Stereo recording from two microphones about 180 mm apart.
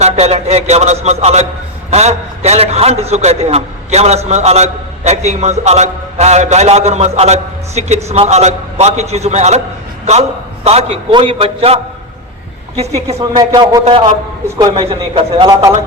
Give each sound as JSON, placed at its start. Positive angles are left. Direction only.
{"t": 0.0, "sound": "a man's voice", "side_deg": -35}
{"t": 13.1, "sound": "speech", "side_deg": -20}
{"t": 14.8, "sound": "a man's voice", "side_deg": -30}